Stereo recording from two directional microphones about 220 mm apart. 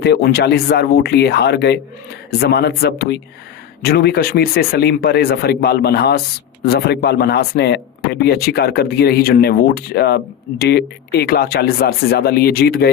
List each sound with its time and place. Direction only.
0.0 s speech: 50° left (ahead or behind)